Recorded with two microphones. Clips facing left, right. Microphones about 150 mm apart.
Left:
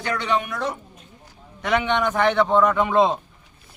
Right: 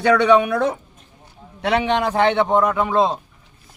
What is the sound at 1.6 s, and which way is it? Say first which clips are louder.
A man's voice: right 3 dB; 30° right (ahead or behind).